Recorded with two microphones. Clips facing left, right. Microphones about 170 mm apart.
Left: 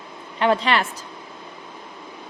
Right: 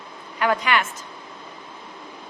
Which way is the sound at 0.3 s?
25° left (ahead or behind).